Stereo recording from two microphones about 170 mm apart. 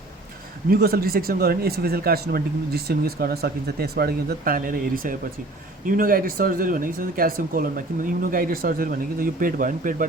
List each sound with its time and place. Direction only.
0.7 s speech: 65° right (ahead or behind)